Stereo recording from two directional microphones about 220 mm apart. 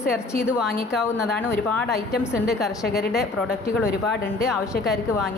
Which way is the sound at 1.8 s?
45° left (ahead or behind).